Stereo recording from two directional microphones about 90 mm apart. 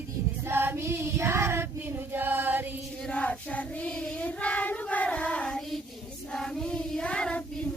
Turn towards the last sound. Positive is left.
turn(degrees=10)  # may be behind; listen again after turning